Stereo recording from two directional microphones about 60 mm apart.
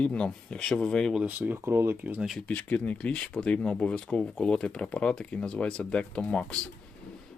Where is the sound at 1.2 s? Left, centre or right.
Right.